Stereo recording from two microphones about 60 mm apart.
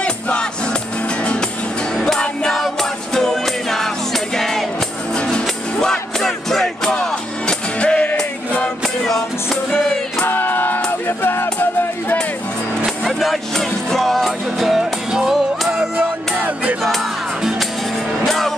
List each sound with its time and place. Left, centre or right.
0.0 s music: centre
7.8 s music: centre
8.8 s music: centre
10.2 s music: left
12.8 s music: centre
15.0 s music: centre
16.3 s music: right
16.8 s music: centre